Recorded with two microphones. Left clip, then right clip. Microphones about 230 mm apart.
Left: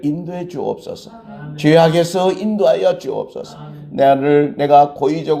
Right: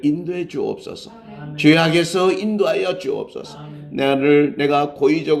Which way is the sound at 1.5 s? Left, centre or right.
Left.